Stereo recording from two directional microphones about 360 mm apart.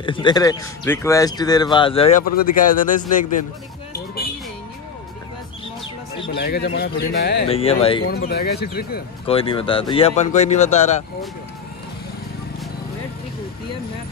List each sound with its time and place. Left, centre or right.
0.0 s speech: centre
3.9 s music: left
6.2 s speech: left
7.4 s speech: centre
8.0 s speech: left
9.2 s speech: centre